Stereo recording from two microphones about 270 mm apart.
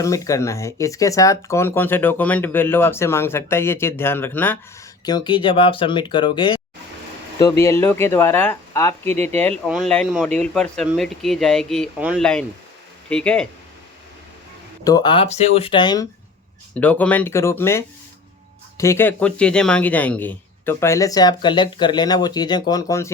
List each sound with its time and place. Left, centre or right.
0.0 s speech: centre
7.6 s speech: centre
14.8 s speech: centre
16.7 s speech: centre